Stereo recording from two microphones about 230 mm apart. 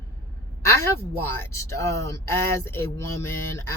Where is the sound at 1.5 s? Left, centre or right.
Centre.